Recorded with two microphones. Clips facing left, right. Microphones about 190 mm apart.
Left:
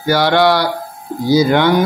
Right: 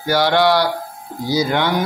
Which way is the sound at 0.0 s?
70° left (ahead or behind).